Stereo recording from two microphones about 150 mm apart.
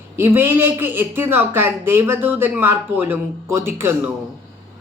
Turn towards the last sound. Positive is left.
turn(degrees=-15)  # may be behind; listen again after turning